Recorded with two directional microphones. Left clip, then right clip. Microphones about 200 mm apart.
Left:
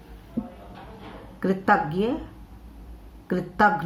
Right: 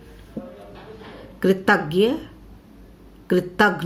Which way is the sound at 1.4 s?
55° right (ahead or behind).